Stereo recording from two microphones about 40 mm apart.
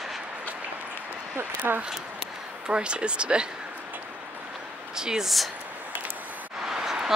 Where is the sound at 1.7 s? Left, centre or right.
Right.